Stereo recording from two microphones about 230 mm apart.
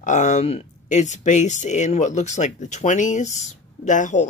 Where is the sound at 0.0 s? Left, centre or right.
Left.